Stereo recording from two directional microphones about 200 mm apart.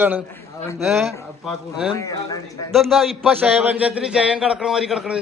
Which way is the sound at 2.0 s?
15° left (ahead or behind).